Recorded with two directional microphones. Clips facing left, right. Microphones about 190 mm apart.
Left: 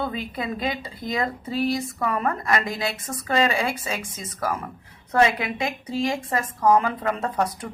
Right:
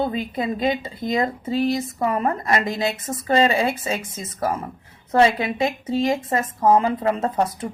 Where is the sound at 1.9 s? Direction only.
30° right (ahead or behind).